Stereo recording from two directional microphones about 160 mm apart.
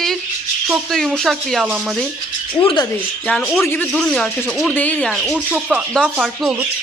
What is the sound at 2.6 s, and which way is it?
Speech, 30° left (ahead or behind).